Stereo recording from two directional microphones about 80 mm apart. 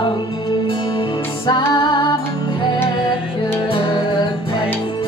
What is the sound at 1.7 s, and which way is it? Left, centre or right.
Female singing, left.